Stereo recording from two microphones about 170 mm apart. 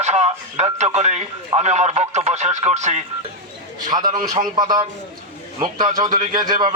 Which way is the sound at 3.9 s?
25° right (ahead or behind).